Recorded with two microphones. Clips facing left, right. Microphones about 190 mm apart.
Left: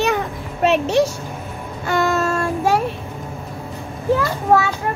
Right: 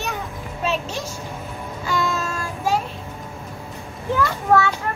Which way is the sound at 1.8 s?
60° left (ahead or behind).